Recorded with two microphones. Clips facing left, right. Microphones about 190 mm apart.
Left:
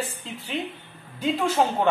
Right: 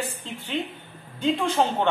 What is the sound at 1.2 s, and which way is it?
Speech, 5° left (ahead or behind).